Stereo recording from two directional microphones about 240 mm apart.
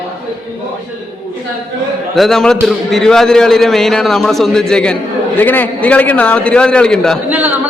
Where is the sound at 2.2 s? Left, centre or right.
Centre.